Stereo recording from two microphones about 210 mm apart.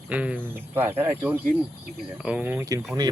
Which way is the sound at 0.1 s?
5° right (ahead or behind).